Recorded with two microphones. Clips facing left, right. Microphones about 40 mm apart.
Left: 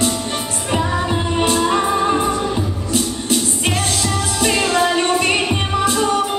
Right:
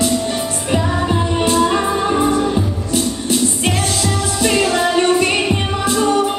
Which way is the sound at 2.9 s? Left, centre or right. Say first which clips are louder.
Right 2 dB; left.